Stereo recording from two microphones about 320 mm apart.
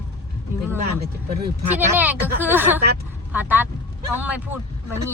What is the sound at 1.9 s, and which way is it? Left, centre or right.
Speech, centre.